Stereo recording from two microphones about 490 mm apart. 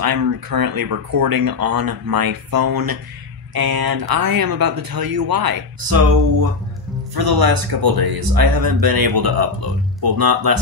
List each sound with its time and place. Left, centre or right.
0.0 s speech: right
7.2 s speech: right